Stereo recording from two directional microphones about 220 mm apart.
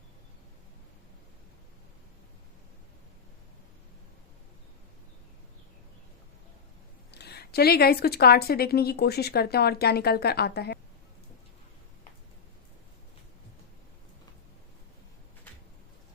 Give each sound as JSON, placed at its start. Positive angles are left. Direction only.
{"t": 7.1, "sound": "speech", "side_deg": 50}